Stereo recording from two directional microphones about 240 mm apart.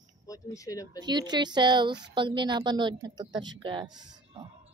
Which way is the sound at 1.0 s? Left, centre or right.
Centre.